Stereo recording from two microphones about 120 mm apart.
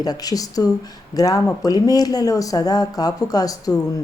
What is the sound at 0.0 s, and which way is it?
Speech, 30° left (ahead or behind).